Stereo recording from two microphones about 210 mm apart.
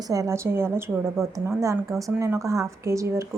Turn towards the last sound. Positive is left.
turn(degrees=-15)  # may be behind; listen again after turning